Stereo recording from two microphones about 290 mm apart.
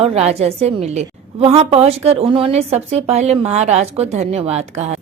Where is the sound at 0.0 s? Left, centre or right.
Right.